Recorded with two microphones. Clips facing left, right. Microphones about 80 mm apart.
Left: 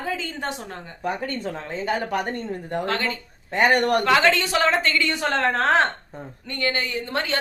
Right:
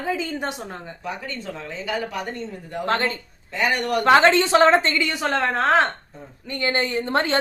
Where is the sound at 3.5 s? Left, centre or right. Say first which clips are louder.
Left 4 dB; left.